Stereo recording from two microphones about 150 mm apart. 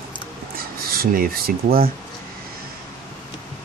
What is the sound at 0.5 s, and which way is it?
Speech, 80° right.